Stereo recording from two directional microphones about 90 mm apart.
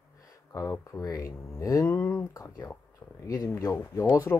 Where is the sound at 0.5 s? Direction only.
35° left (ahead or behind).